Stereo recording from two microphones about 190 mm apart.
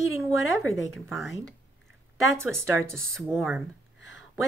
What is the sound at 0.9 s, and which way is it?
Speech, centre (ahead or behind).